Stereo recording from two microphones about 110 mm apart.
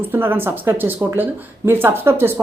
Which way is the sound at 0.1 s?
20° right (ahead or behind).